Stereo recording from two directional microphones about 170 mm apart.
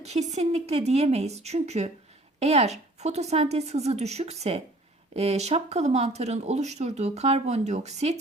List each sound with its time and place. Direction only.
0.0 s speech: 40° right (ahead or behind)